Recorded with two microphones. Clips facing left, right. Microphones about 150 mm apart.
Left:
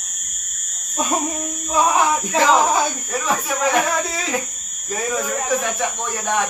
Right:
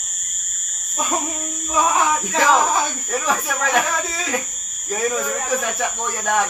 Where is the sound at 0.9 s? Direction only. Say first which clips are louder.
Left 2 dB; 15° left (ahead or behind).